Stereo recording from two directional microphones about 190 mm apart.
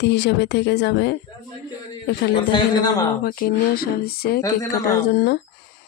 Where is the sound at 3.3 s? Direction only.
50° left (ahead or behind).